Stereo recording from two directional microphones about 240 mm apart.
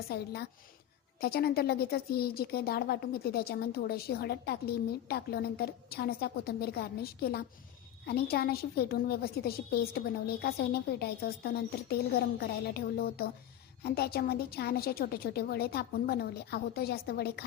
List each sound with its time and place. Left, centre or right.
0.1 s a woman's voice: left